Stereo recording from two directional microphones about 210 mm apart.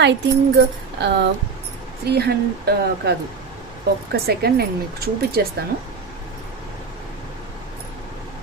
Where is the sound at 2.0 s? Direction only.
50° right (ahead or behind).